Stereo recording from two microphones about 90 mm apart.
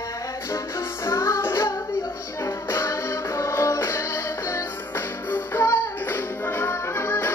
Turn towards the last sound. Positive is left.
turn(degrees=25)  # may be behind; listen again after turning